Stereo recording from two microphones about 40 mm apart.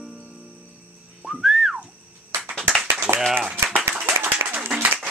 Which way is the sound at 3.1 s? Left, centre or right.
Right.